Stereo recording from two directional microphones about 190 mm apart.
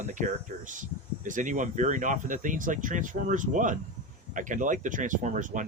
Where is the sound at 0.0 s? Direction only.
40° right (ahead or behind).